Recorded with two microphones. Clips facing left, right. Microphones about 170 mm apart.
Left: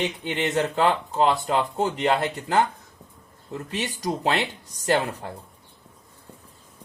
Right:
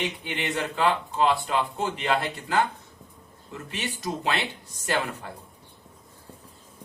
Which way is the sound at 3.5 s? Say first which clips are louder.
Left 4 dB; 40° left (ahead or behind).